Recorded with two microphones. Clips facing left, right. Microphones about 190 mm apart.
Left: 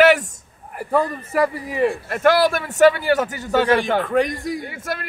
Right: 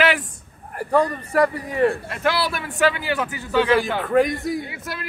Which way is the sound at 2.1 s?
50° left (ahead or behind).